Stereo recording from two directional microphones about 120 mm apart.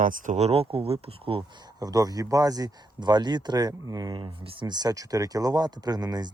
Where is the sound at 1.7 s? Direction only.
30° right (ahead or behind).